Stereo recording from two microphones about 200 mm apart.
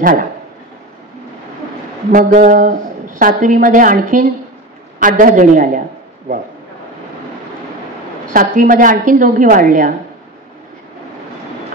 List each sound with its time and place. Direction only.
2.1 s a woman's voice: 40° right (ahead or behind)
8.3 s a woman's voice: 40° right (ahead or behind)